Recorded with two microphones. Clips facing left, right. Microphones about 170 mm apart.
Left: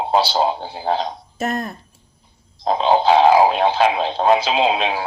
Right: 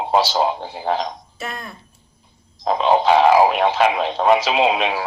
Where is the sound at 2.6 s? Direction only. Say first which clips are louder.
Even; 30° left (ahead or behind).